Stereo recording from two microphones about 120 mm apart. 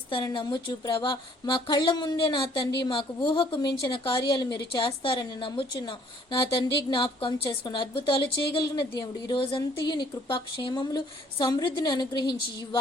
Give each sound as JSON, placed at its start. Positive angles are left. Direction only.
{"t": 0.1, "sound": "a woman's voice", "side_deg": 40}